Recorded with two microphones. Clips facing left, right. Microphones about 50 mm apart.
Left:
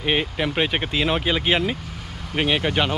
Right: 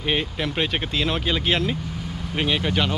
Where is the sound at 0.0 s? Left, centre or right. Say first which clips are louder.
Left 2 dB; centre.